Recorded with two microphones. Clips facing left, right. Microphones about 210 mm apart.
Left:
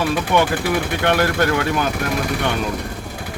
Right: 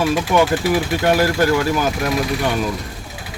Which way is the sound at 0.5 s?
55° left (ahead or behind).